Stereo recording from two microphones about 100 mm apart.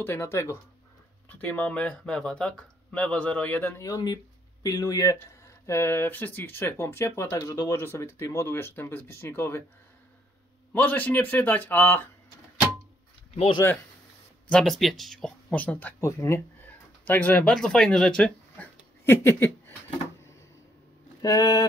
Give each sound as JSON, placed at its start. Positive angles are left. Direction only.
{"t": 0.0, "sound": "speech", "side_deg": 25}
{"t": 1.4, "sound": "speech", "side_deg": 15}
{"t": 3.9, "sound": "speech", "side_deg": 45}
{"t": 10.7, "sound": "speech", "side_deg": 20}
{"t": 14.5, "sound": "speech", "side_deg": 5}
{"t": 15.5, "sound": "speech", "side_deg": 15}
{"t": 16.0, "sound": "speech", "side_deg": 30}
{"t": 17.0, "sound": "speech", "side_deg": 15}
{"t": 17.6, "sound": "speech", "side_deg": 5}
{"t": 19.0, "sound": "a sound", "side_deg": 25}
{"t": 21.2, "sound": "speech", "side_deg": 35}